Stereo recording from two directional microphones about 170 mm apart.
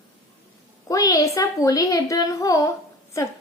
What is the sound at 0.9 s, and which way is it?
A woman's voice, 20° left (ahead or behind).